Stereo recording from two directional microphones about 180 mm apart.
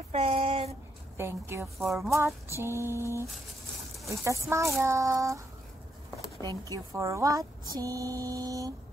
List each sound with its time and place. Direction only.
0.1 s a sound: 35° right (ahead or behind)
1.1 s mantra: 15° right (ahead or behind)
6.7 s speech: 15° right (ahead or behind)